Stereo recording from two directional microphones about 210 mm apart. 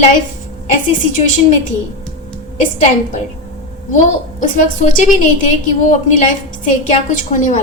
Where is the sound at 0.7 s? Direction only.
35° left (ahead or behind).